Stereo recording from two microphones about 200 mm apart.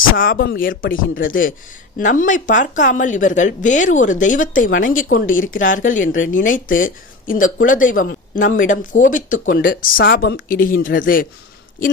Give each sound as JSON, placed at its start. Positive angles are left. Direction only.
{"t": 0.2, "sound": "speech", "side_deg": 45}